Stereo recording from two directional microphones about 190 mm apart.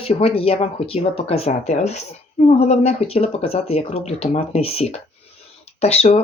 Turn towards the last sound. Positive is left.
turn(degrees=35)  # may be behind; listen again after turning